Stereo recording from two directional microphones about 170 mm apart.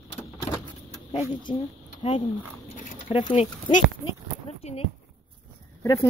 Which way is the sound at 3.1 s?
30° left (ahead or behind).